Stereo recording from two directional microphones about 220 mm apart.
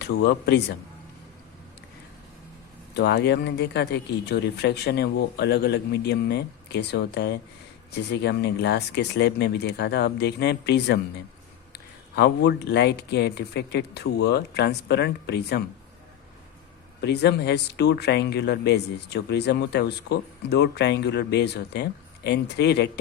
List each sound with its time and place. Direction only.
0.0 s speech: 50° left (ahead or behind)
2.9 s speech: 50° left (ahead or behind)
17.0 s speech: 50° left (ahead or behind)